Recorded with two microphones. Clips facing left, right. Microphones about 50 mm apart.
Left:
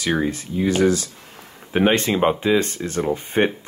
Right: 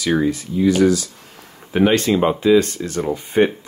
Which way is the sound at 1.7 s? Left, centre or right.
Left.